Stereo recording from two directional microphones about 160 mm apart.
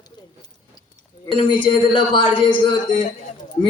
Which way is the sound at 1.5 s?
30° left (ahead or behind).